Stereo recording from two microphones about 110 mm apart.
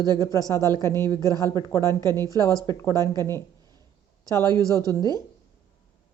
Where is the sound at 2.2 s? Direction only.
35° right (ahead or behind).